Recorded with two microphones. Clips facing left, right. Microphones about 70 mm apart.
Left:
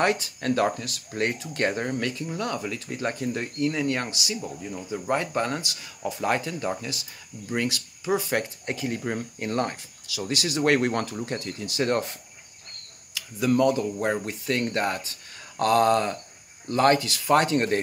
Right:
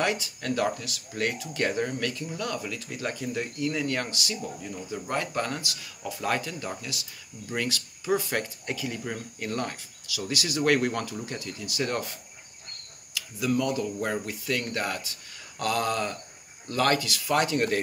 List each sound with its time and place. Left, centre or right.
0.0 s speech: left
8.7 s speech: left
9.0 s speech: left
10.9 s speech: left
13.5 s speech: left